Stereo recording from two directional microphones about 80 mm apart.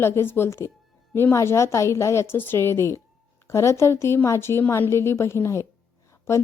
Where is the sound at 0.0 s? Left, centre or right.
Left.